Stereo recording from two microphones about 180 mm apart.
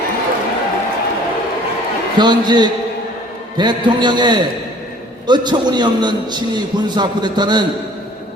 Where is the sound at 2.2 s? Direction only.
25° right (ahead or behind).